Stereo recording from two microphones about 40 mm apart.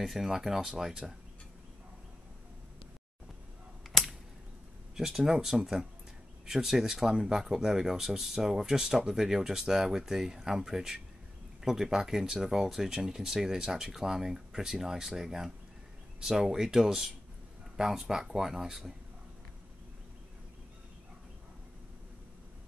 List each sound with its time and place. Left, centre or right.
0.0 s speech: centre
4.9 s speech: centre